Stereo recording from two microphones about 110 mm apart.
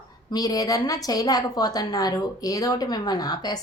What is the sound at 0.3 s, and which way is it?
A woman's voice, 35° left (ahead or behind).